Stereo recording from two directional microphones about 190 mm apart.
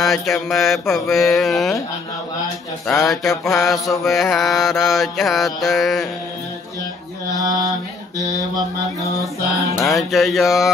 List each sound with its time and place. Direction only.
0.0 s mantra: centre (ahead or behind)
3.0 s mantra: centre (ahead or behind)
7.4 s a sound: 20° right (ahead or behind)
8.2 s mantra: 20° left (ahead or behind)
9.1 s music: 15° left (ahead or behind)
9.8 s mantra: centre (ahead or behind)